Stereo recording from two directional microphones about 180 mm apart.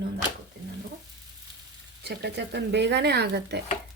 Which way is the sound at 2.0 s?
65° right (ahead or behind).